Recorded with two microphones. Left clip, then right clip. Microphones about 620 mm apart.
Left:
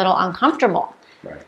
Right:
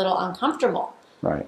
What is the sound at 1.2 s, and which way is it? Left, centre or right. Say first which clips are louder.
Speech: right 11 dB; right.